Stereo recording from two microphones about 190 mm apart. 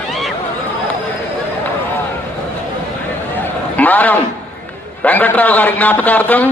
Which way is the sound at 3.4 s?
10° left (ahead or behind).